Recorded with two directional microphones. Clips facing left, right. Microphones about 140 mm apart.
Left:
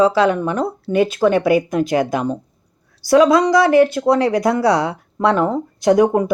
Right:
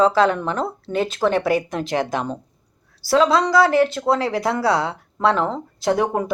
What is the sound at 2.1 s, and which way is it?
Speech, 10° left (ahead or behind).